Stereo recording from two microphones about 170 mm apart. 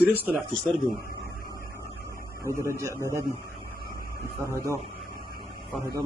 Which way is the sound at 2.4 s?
15° right (ahead or behind).